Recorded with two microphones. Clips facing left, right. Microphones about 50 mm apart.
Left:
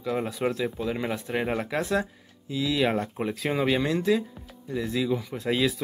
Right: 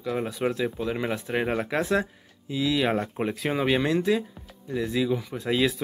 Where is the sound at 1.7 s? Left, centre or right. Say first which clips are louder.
Right 2 dB; centre.